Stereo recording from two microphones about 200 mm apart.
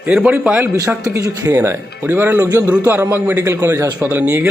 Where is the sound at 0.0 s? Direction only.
5° right (ahead or behind).